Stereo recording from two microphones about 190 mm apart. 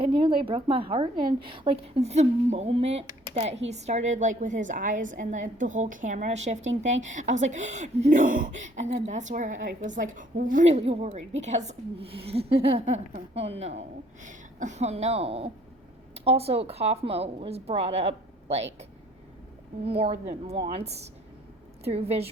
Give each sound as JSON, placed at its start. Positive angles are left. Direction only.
{"t": 0.0, "sound": "a woman's voice", "side_deg": -25}
{"t": 19.8, "sound": "a woman's voice", "side_deg": -30}